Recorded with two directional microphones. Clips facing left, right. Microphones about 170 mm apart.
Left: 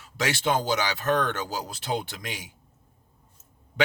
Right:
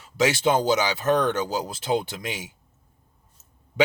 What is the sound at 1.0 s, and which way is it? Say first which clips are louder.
Speech: right 3 dB; 20° right (ahead or behind).